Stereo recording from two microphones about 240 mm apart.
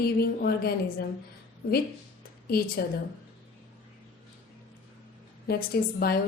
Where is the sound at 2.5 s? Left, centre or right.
Left.